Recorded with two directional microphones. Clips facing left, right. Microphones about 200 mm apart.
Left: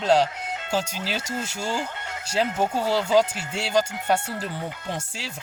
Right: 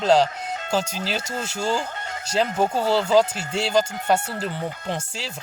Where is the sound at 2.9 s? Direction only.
15° left (ahead or behind).